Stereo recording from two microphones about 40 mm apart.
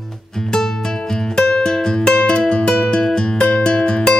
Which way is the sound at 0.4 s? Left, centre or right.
Centre.